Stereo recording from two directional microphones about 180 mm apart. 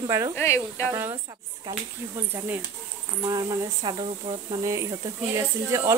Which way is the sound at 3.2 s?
20° right (ahead or behind).